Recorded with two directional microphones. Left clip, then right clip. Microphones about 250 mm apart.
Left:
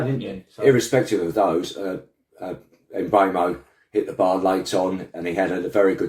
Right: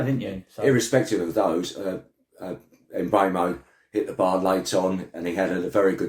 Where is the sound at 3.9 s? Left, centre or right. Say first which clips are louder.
Left 3 dB; centre.